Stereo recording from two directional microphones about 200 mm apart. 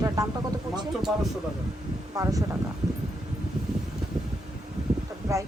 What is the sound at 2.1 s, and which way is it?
Speech, 15° right (ahead or behind).